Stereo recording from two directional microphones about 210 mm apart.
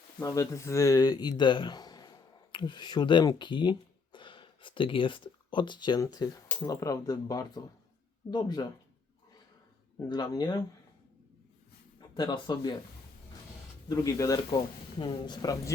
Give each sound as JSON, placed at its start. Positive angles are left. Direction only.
{"t": 0.2, "sound": "speech", "side_deg": 15}
{"t": 10.1, "sound": "speech", "side_deg": 20}
{"t": 11.9, "sound": "speech", "side_deg": 20}
{"t": 13.8, "sound": "speech", "side_deg": 15}